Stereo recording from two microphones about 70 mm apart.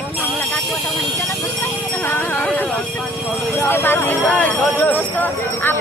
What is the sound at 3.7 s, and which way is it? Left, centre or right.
Speech, left.